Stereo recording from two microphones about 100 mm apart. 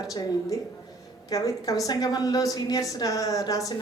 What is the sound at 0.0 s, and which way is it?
A woman's voice, 40° left (ahead or behind).